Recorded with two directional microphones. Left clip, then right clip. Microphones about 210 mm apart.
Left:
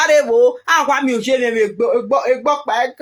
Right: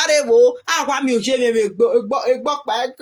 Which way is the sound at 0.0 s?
30° right (ahead or behind).